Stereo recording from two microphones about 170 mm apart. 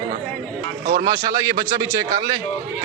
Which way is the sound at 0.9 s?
55° right (ahead or behind).